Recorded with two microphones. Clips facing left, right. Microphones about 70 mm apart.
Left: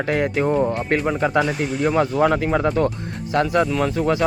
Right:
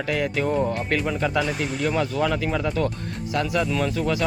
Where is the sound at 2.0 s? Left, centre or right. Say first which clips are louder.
Left 5 dB; left.